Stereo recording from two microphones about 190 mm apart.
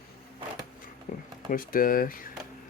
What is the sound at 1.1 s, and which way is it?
Speech, 45° left (ahead or behind).